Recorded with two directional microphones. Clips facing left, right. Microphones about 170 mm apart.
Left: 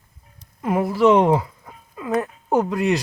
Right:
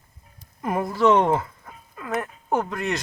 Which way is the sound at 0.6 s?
5° left (ahead or behind).